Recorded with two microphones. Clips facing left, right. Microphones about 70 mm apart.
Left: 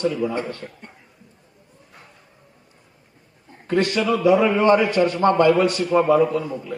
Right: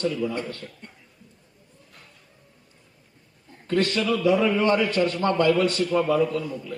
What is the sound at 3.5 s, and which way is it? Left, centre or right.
A man's voice, left.